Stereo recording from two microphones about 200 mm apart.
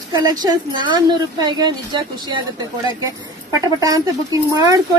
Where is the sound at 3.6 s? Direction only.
20° right (ahead or behind).